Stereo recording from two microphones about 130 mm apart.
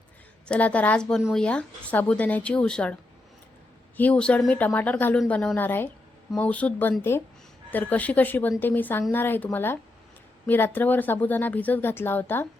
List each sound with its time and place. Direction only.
0.4 s speech: 10° left (ahead or behind)